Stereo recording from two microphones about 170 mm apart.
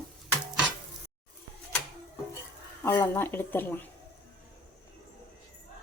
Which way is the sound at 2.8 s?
15° left (ahead or behind).